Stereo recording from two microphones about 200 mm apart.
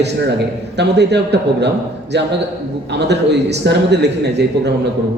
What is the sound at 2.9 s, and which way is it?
A man's voice, 60° right (ahead or behind).